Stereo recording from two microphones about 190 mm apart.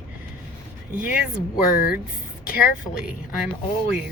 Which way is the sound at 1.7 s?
50° left (ahead or behind).